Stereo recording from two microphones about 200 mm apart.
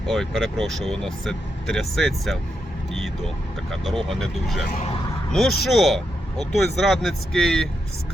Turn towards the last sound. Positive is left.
turn(degrees=5)  # may be behind; listen again after turning